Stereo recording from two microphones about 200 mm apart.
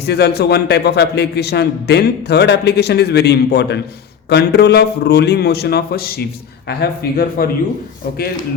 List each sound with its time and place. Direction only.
0.0 s a man's voice: 55° left (ahead or behind)